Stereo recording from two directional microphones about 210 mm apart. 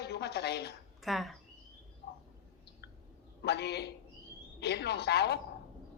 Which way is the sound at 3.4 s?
50° left (ahead or behind).